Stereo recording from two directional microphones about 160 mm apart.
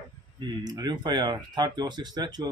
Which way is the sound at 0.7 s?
25° right (ahead or behind).